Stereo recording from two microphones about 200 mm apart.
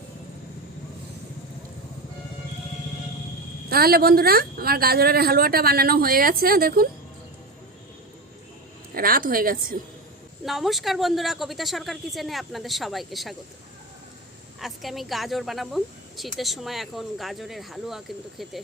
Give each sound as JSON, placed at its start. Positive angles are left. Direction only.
{"t": 3.7, "sound": "speech", "side_deg": -50}
{"t": 9.0, "sound": "speech", "side_deg": -45}
{"t": 10.4, "sound": "speech", "side_deg": 0}
{"t": 14.6, "sound": "speech", "side_deg": 0}